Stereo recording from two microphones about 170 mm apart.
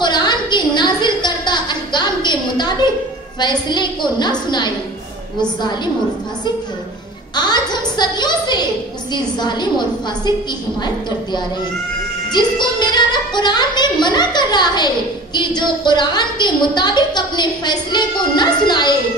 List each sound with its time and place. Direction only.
0.0 s a sound: 25° left (ahead or behind)
3.3 s a woman's voice: 25° left (ahead or behind)
7.3 s a woman's voice: 25° left (ahead or behind)